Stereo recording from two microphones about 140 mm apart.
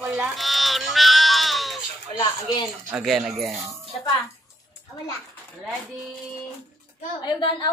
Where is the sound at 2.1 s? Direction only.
30° left (ahead or behind).